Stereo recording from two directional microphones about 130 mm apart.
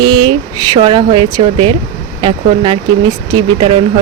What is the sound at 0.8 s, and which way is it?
Speech, 45° right (ahead or behind).